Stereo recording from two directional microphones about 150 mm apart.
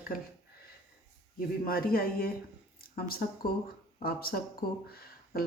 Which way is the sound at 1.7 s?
75° left (ahead or behind).